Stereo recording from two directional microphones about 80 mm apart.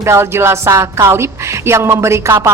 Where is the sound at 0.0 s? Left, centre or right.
Right.